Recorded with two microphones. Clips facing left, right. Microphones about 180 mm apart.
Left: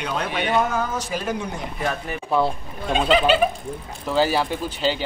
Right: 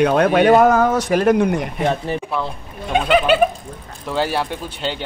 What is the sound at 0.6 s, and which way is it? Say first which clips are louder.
Speech: right 9 dB; 70° right (ahead or behind).